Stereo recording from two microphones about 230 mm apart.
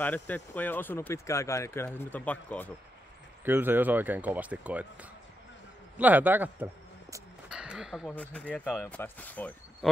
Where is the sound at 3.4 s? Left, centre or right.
Centre.